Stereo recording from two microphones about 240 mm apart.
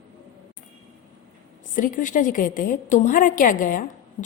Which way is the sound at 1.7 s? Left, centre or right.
Left.